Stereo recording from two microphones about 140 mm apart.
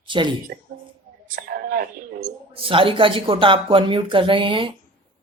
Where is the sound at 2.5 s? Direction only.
40° right (ahead or behind).